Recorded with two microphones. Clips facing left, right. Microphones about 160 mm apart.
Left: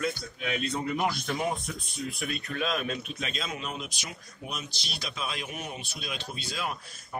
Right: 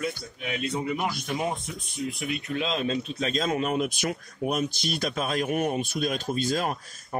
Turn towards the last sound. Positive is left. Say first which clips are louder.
# right 5 dB
turn(degrees=-45)  # may be behind; listen again after turning